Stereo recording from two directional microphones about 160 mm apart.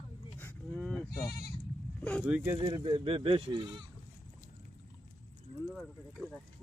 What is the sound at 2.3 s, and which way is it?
Speech, 10° right (ahead or behind).